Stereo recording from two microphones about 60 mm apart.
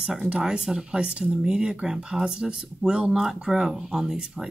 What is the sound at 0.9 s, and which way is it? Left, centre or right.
Speech, centre.